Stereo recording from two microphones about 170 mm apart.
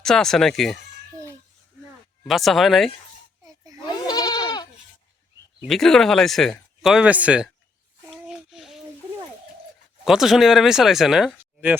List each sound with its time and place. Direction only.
0.0 s speech: 5° left (ahead or behind)
2.2 s speech: centre (ahead or behind)
3.8 s goat: 25° left (ahead or behind)
5.6 s speech: centre (ahead or behind)
8.1 s a sound: 5° right (ahead or behind)
10.0 s speech: centre (ahead or behind)